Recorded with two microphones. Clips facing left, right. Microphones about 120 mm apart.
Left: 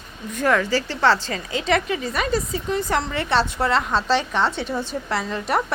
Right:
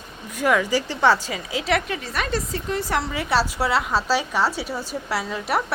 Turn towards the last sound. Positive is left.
turn(degrees=-5)  # may be behind; listen again after turning